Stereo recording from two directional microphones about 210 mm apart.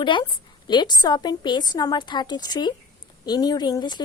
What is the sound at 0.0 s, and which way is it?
A woman's voice, 20° left (ahead or behind).